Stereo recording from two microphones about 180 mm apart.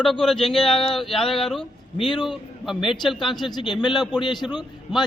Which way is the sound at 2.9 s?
Centre (ahead or behind).